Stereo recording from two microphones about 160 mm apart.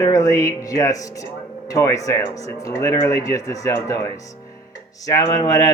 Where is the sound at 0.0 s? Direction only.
20° left (ahead or behind).